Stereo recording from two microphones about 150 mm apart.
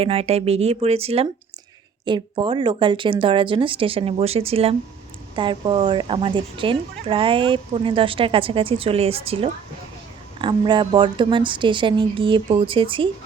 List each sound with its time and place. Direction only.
0.0 s a woman's voice: 40° right (ahead or behind)